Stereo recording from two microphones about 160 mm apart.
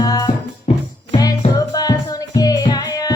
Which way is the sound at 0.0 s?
25° left (ahead or behind).